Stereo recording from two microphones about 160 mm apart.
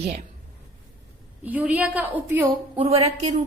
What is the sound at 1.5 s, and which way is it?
A woman's voice, 10° right (ahead or behind).